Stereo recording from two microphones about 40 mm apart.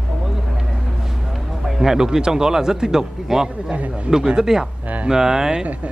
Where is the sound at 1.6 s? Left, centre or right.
Centre.